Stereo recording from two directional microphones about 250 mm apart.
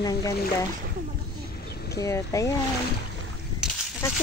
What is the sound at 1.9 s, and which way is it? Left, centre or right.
Speech, centre.